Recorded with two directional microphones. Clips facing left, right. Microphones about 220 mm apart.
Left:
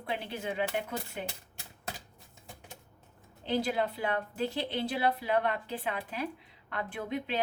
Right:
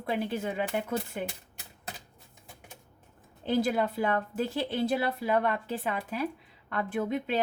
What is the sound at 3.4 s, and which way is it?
A woman's voice, 45° right (ahead or behind).